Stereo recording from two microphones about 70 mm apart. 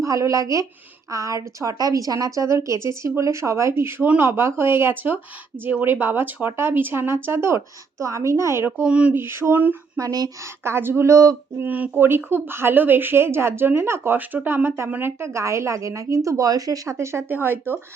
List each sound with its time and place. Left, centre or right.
0.0 s a woman's voice: right
8.9 s a sound: centre
9.1 s speech: right
10.0 s speech: right
10.4 s speech: right
11.5 s speech: right
14.2 s speech: right
15.2 s a woman's voice: right